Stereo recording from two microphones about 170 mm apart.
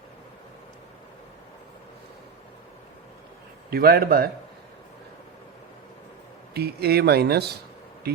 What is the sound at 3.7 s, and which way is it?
Speech, 60° right (ahead or behind).